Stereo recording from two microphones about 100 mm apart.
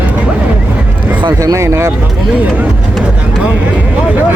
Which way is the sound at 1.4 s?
30° right (ahead or behind).